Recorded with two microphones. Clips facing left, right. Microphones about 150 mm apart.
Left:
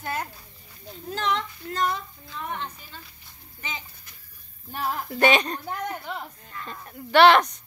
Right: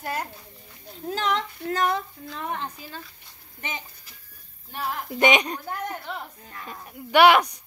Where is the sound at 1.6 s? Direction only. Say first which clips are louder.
Right 3 dB; 65° right (ahead or behind).